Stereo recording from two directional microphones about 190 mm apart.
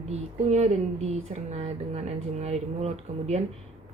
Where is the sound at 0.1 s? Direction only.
35° right (ahead or behind).